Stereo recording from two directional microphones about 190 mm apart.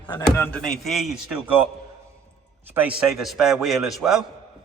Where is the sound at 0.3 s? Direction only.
10° left (ahead or behind); by 1.6 s 5° right (ahead or behind).